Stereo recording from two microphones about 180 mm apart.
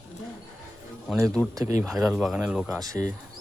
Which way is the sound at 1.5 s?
15° right (ahead or behind).